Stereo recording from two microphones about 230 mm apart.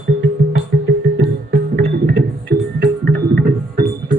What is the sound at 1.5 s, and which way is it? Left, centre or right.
Music, right.